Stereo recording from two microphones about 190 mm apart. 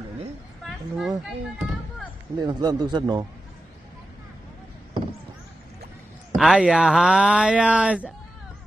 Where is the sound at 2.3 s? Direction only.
20° right (ahead or behind).